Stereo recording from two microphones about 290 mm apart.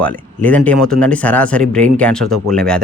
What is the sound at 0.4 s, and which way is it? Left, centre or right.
Speech, centre.